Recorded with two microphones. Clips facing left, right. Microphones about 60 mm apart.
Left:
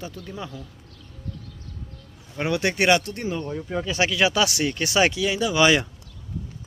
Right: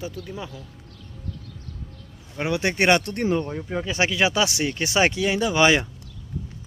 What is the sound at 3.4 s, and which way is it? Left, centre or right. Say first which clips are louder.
Speech: right 2 dB; right.